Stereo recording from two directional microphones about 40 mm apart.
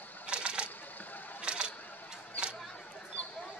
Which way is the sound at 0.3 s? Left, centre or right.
Right.